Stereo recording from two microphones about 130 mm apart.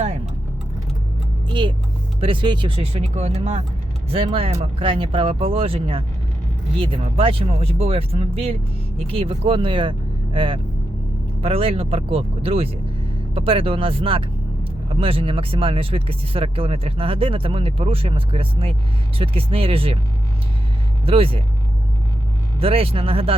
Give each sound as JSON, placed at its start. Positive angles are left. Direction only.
{"t": 1.5, "sound": "speech", "side_deg": -40}
{"t": 21.0, "sound": "speech", "side_deg": -45}
{"t": 22.6, "sound": "speech", "side_deg": -45}